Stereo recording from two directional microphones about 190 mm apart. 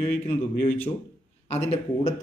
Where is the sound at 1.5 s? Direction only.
35° left (ahead or behind).